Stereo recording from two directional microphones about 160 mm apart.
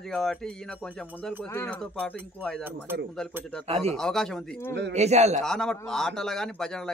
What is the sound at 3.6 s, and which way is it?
Speech, 40° right (ahead or behind).